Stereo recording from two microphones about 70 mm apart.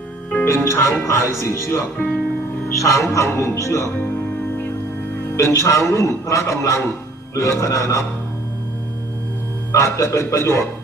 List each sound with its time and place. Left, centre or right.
0.4 s speech: left
2.0 s speech: centre
2.8 s a man's voice: left
5.4 s a man's voice: left
9.7 s a man's voice: left